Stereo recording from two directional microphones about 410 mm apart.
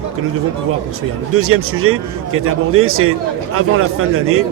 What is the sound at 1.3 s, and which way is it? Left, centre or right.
Speech, right.